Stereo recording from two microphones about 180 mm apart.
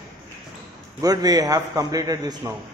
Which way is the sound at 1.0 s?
20° right (ahead or behind).